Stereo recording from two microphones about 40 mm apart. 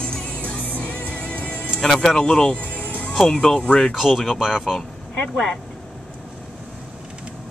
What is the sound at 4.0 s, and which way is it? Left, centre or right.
Speech, centre.